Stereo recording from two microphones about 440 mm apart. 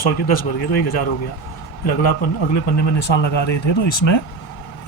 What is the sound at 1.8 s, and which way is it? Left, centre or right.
A man's voice, left.